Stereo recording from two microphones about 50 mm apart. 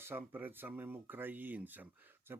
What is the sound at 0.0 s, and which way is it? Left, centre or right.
Speech, right.